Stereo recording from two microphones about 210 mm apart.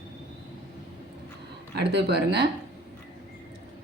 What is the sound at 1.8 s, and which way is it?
Speech, 50° right (ahead or behind).